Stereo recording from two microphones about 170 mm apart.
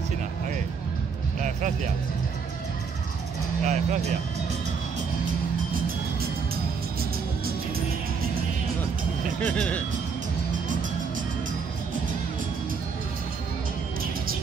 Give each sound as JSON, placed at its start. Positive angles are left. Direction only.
{"t": 3.6, "sound": "speech", "side_deg": -45}
{"t": 6.5, "sound": "music", "side_deg": -60}
{"t": 9.4, "sound": "speech", "side_deg": 10}